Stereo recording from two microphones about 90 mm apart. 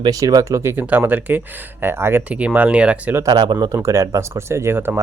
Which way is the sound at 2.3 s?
15° right (ahead or behind).